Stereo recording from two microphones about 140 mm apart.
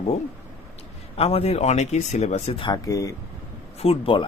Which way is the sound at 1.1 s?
45° left (ahead or behind).